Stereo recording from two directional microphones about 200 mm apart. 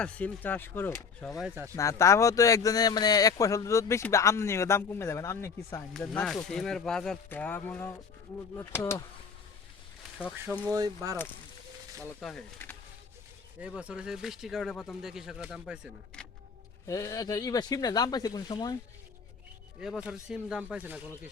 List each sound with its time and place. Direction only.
0.0 s speech: 5° left (ahead or behind)
1.4 s speech: 10° right (ahead or behind)
1.7 s speech: 15° left (ahead or behind)
10.2 s speech: 5° right (ahead or behind)
10.7 s speech: 20° right (ahead or behind)
12.2 s speech: 5° left (ahead or behind)
13.6 s speech: 5° right (ahead or behind)
16.8 s speech: 15° left (ahead or behind)
19.8 s speech: centre (ahead or behind)